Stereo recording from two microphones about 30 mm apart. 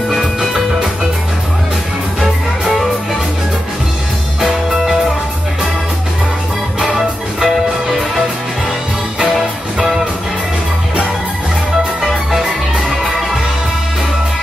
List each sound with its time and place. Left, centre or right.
0.1 s music: centre
6.8 s music: centre
12.0 s music: centre